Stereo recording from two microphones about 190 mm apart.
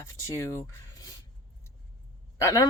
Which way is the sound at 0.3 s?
15° left (ahead or behind).